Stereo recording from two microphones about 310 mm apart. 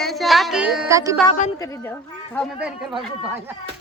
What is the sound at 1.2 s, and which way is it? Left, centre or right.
Speech, left.